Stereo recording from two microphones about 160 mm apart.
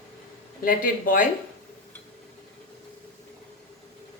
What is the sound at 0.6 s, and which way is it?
Speech, 60° left (ahead or behind).